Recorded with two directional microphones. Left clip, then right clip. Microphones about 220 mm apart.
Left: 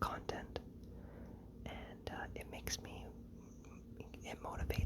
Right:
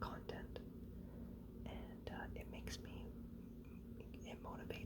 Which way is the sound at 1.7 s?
20° left (ahead or behind).